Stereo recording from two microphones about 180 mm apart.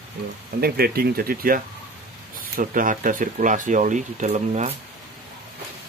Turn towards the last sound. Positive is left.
turn(degrees=-40)  # may be behind; listen again after turning